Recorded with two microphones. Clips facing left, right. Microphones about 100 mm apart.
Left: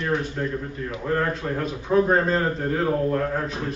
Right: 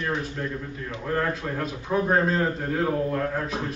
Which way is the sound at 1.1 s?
Centre (ahead or behind).